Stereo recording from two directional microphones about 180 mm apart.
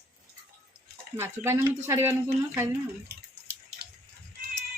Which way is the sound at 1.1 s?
15° right (ahead or behind).